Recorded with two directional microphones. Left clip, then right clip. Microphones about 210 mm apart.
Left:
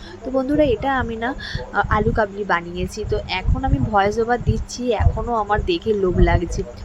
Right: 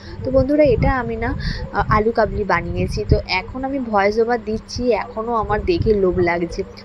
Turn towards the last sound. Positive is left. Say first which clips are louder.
# right 2 dB
turn(degrees=-5)  # may be behind; listen again after turning